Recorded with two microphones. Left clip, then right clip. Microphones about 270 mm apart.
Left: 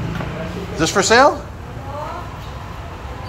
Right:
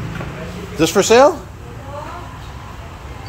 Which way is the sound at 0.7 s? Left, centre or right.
Right.